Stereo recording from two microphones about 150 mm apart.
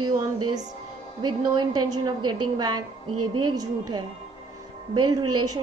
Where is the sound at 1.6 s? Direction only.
30° right (ahead or behind).